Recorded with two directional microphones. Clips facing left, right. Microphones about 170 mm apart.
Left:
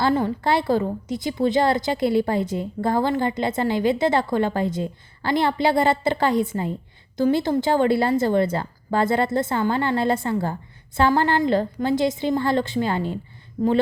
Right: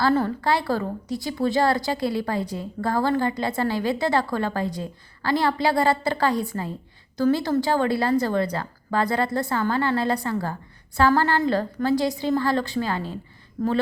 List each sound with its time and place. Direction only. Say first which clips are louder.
0.1 s a woman's voice: even; 15° left (ahead or behind)
0.4 s a woman's voice: left 3 dB; 25° left (ahead or behind)